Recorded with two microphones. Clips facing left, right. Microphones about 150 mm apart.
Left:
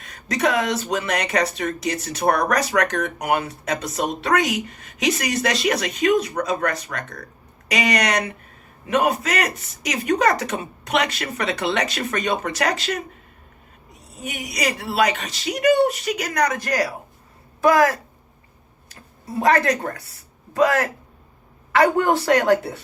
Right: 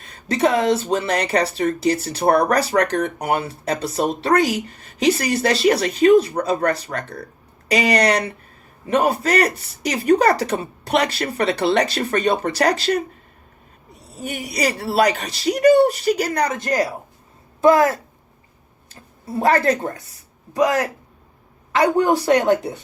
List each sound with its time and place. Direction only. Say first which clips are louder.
0.0 s a woman's voice: right 3 dB; 30° right (ahead or behind)